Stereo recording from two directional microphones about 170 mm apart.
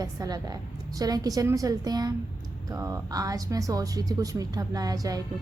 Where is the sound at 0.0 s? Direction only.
20° right (ahead or behind).